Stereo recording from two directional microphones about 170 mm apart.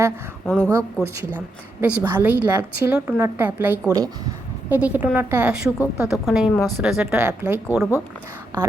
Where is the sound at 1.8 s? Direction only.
10° right (ahead or behind).